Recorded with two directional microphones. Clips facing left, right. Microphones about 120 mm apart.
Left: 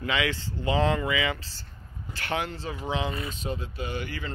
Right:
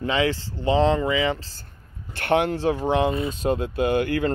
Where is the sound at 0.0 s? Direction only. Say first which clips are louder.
Right 5 dB; 35° right (ahead or behind).